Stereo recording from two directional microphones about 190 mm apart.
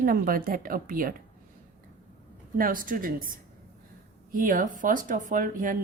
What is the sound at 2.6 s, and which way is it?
Speech, 45° right (ahead or behind).